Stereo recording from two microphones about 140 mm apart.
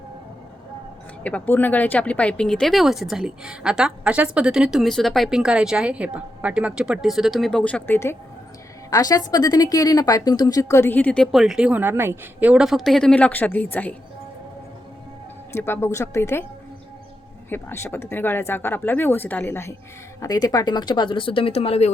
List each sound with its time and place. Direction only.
1.2 s speech: 10° left (ahead or behind)
8.9 s a woman's voice: 25° left (ahead or behind)
15.5 s a woman's voice: 15° left (ahead or behind)
17.5 s a woman's voice: 15° left (ahead or behind)
20.2 s speech: 25° left (ahead or behind); by 21.9 s 45° left (ahead or behind)